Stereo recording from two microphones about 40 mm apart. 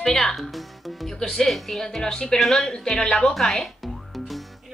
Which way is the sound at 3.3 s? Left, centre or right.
Centre.